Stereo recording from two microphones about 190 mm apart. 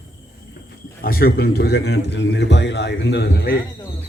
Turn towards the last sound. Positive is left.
turn(degrees=60)  # may be behind; listen again after turning